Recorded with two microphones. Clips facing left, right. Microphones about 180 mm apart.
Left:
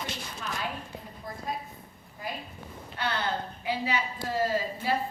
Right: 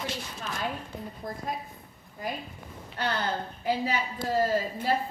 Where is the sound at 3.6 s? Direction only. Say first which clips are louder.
Right 3 dB; 40° right (ahead or behind).